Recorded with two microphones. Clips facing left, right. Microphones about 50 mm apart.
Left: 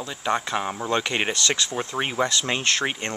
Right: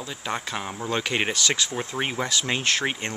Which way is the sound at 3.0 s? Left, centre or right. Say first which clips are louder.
Left 2 dB; centre.